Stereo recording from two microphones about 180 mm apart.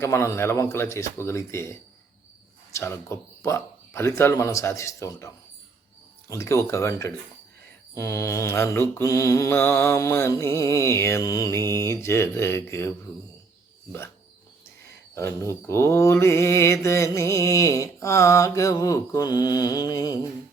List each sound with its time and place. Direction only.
0.0 s mantra: 15° left (ahead or behind)
15.6 s mantra: 15° left (ahead or behind)